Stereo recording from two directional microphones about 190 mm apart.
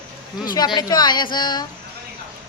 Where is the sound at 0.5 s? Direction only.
20° left (ahead or behind).